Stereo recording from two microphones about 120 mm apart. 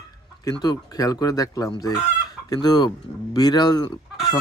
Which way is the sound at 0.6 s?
35° left (ahead or behind).